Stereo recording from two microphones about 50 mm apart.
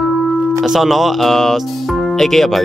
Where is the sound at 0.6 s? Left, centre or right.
Centre.